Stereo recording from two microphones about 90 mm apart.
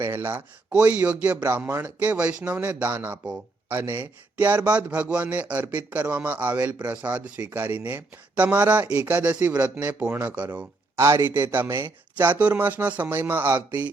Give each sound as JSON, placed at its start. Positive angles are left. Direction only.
{"t": 0.0, "sound": "speech", "side_deg": -20}
{"t": 1.5, "sound": "speech", "side_deg": -25}
{"t": 11.0, "sound": "a man's voice", "side_deg": -30}